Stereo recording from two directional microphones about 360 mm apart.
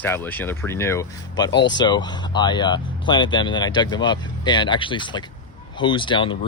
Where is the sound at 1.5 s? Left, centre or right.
Left.